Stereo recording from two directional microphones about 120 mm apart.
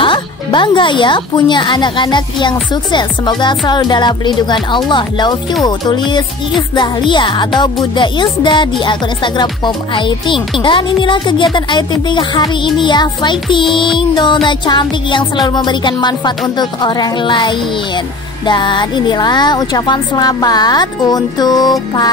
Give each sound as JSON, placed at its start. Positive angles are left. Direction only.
{"t": 0.0, "sound": "music", "side_deg": 45}